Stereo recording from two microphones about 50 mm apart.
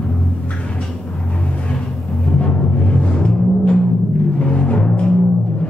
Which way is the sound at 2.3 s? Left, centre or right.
Left.